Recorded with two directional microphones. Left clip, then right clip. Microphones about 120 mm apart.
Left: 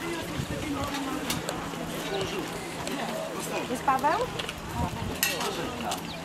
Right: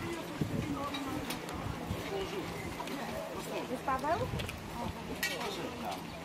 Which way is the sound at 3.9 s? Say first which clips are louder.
Left 9 dB; 45° left (ahead or behind).